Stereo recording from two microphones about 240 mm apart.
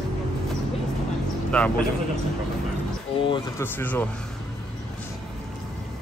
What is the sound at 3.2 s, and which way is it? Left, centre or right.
Speech, centre.